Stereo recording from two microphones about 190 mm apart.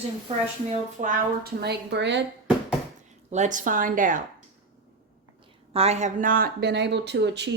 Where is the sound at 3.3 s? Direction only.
40° right (ahead or behind).